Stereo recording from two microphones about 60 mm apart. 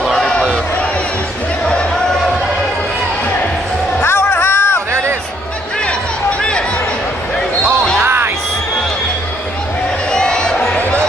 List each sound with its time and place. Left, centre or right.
0.2 s a sound: centre
4.0 s music: left
8.0 s music: right
10.1 s crowd: centre